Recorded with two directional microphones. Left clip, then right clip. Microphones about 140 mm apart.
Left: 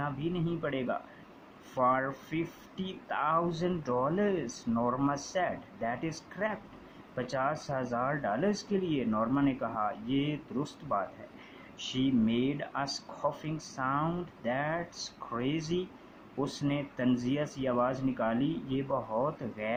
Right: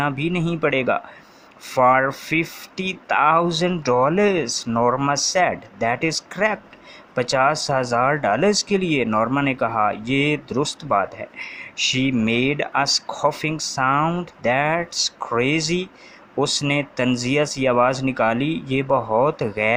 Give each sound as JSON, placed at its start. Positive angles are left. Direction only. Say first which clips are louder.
{"t": 0.0, "sound": "speech", "louder": "right 12 dB", "side_deg": -30}